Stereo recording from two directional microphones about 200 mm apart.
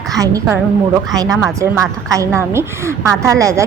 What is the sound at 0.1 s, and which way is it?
A woman's voice, 15° right (ahead or behind).